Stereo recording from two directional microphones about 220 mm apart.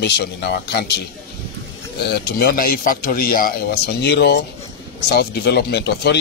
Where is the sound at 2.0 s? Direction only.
45° left (ahead or behind).